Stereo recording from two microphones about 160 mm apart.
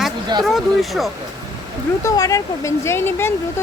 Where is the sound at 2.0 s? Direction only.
20° left (ahead or behind).